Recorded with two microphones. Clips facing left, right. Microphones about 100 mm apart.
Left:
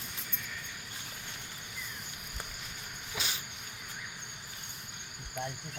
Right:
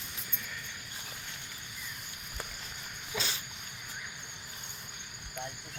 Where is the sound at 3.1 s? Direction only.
15° left (ahead or behind).